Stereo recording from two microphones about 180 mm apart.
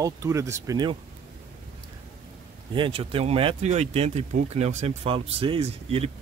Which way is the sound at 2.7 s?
30° right (ahead or behind).